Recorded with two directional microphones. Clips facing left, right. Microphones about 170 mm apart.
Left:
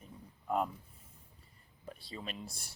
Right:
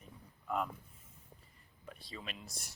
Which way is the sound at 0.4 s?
35° left (ahead or behind).